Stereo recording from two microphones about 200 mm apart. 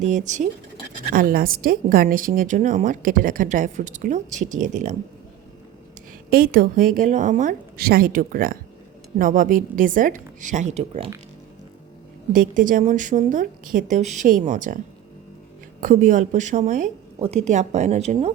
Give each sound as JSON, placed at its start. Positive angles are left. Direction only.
{"t": 0.0, "sound": "a woman's voice", "side_deg": -35}
{"t": 6.3, "sound": "a woman's voice", "side_deg": -45}
{"t": 12.3, "sound": "a woman's voice", "side_deg": -45}
{"t": 15.8, "sound": "a woman's voice", "side_deg": -40}